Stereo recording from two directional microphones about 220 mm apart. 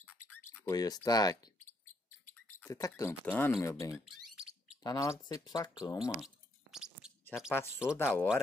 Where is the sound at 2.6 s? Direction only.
15° left (ahead or behind).